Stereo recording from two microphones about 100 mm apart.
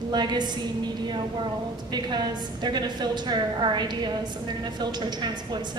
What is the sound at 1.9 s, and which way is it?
A woman's voice, 45° right (ahead or behind).